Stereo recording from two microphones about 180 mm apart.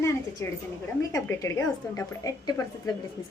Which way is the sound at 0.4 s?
15° left (ahead or behind).